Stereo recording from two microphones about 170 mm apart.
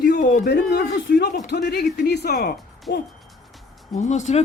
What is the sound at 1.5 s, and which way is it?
Speech, 75° left (ahead or behind).